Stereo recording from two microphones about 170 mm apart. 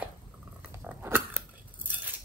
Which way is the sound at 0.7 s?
10° right (ahead or behind).